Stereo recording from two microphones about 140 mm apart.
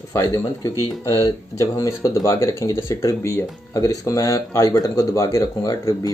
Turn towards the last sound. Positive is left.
turn(degrees=25)  # may be behind; listen again after turning